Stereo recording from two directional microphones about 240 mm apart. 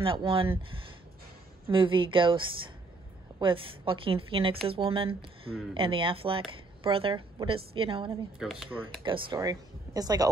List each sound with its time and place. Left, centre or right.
0.0 s speech: right
1.7 s speech: right
8.4 s speech: centre
9.0 s speech: centre